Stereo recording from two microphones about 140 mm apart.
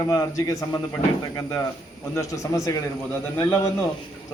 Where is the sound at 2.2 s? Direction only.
25° left (ahead or behind).